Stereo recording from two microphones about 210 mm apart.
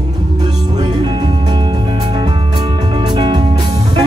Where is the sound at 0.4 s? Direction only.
20° right (ahead or behind).